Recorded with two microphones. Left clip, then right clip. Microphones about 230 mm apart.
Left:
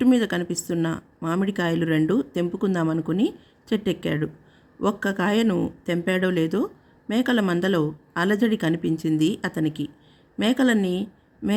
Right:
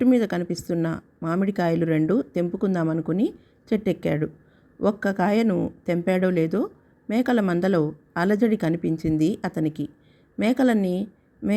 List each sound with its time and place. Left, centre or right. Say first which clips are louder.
0.0 s a woman's voice: even; centre